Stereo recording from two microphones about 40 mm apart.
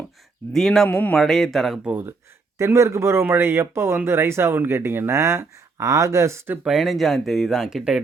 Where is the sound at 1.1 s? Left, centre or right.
Centre.